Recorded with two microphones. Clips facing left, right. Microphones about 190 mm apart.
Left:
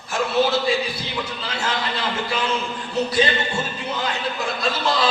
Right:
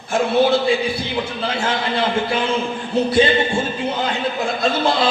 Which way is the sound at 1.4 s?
55° right (ahead or behind).